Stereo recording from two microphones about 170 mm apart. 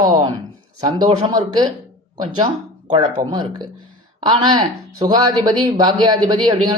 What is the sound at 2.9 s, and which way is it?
Speech, 25° right (ahead or behind).